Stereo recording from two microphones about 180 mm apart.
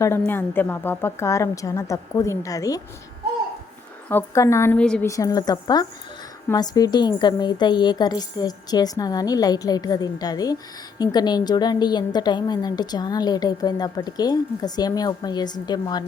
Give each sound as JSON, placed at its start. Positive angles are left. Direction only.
{"t": 0.3, "sound": "a woman's voice", "side_deg": 10}
{"t": 4.1, "sound": "a woman's voice", "side_deg": 15}
{"t": 5.0, "sound": "a woman's voice", "side_deg": 20}